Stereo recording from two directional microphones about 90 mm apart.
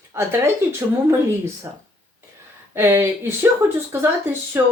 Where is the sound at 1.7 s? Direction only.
20° right (ahead or behind).